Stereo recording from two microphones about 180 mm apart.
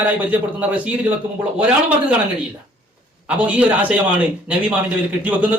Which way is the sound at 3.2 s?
5° right (ahead or behind).